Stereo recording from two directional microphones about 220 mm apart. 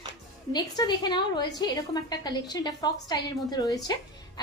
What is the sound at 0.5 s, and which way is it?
A woman's voice, 20° left (ahead or behind).